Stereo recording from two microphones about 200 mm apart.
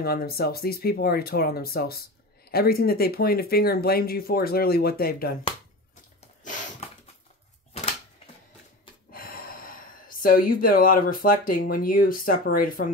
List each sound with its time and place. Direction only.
0.0 s speech: 50° left (ahead or behind)
9.1 s speech: 45° left (ahead or behind)